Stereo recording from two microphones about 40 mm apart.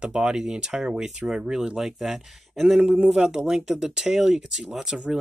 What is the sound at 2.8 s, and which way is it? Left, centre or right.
Speech, right.